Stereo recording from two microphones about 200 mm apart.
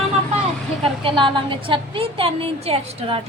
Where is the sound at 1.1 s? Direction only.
25° right (ahead or behind).